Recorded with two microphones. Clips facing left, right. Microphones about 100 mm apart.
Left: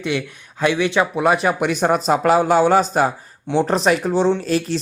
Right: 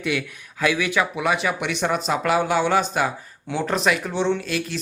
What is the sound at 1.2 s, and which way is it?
Speech, 40° left (ahead or behind).